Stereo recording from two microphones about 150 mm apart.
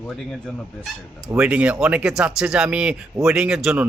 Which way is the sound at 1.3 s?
10° right (ahead or behind).